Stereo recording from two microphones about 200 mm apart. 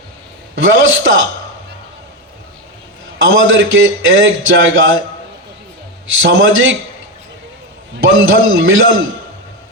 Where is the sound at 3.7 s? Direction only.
75° right (ahead or behind).